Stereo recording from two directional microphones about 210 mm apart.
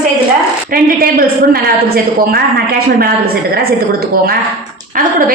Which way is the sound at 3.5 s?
45° right (ahead or behind).